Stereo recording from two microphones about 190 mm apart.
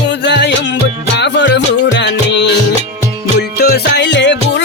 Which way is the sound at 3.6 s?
60° left (ahead or behind).